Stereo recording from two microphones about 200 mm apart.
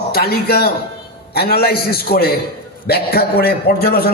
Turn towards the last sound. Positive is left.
turn(degrees=50)  # may be behind; listen again after turning